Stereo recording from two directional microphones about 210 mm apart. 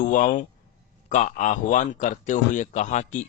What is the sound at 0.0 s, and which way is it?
A man's voice, 40° left (ahead or behind).